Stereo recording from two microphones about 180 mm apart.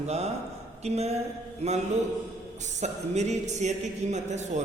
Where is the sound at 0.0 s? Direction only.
35° right (ahead or behind).